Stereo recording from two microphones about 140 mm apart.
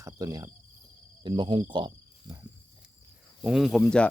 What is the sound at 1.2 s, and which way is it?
Speech, 35° right (ahead or behind).